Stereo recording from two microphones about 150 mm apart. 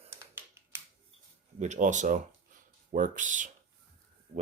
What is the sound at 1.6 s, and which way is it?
Speech, 55° right (ahead or behind).